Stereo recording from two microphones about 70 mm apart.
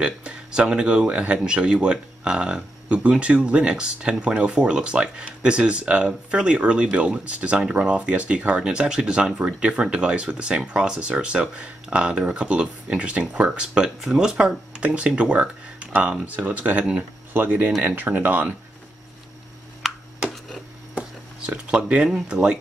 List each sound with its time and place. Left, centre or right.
0.0 s speech: centre
19.8 s a sound: centre
21.5 s speech: centre